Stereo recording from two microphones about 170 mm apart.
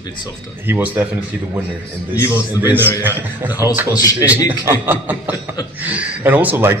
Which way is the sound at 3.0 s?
10° right (ahead or behind).